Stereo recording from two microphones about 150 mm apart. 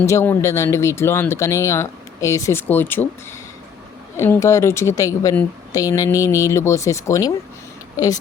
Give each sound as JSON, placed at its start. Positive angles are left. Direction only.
{"t": 0.0, "sound": "speech", "side_deg": 20}
{"t": 4.2, "sound": "speech", "side_deg": 20}